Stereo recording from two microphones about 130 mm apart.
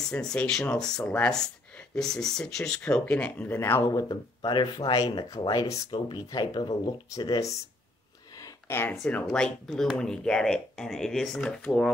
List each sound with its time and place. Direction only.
0.0 s speech: 5° left (ahead or behind)
4.1 s speech: 35° left (ahead or behind)
8.4 s a sound: 20° left (ahead or behind)
9.0 s speech: 5° left (ahead or behind)